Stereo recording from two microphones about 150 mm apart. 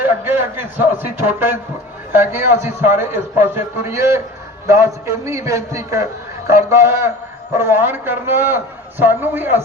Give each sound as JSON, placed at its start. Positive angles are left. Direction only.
{"t": 0.0, "sound": "a man's voice", "side_deg": -15}